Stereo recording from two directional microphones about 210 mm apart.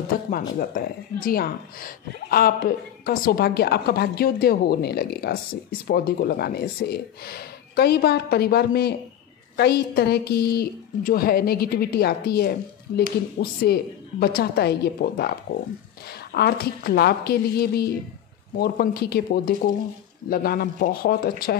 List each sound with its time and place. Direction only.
0.1 s a woman's voice: 40° left (ahead or behind)